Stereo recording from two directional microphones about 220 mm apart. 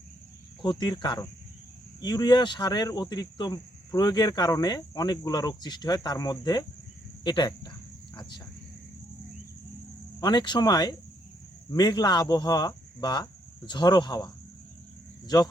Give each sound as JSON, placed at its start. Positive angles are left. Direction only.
{"t": 0.6, "sound": "speech", "side_deg": 20}
{"t": 10.2, "sound": "speech", "side_deg": 20}